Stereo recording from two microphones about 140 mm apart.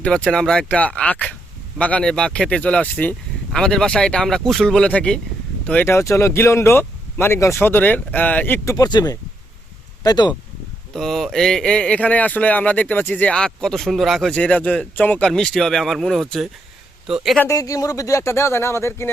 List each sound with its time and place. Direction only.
0.0 s speech: 10° left (ahead or behind)
8.7 s speech: 30° left (ahead or behind)
10.9 s speech: centre (ahead or behind)
17.5 s speech: 25° left (ahead or behind)